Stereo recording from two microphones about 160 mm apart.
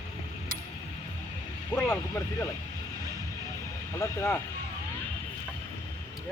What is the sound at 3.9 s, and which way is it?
Speech, 15° left (ahead or behind).